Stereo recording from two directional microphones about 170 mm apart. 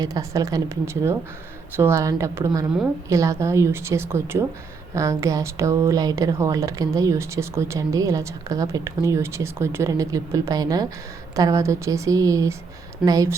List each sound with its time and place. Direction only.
0.0 s a woman's voice: 20° right (ahead or behind)